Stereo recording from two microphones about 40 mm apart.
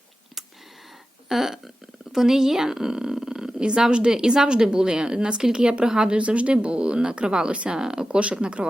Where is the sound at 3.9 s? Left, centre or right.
Right.